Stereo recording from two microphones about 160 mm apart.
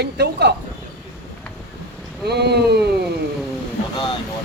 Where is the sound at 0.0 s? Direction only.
90° right.